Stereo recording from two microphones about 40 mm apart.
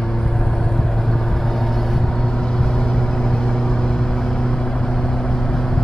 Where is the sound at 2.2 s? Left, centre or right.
Centre.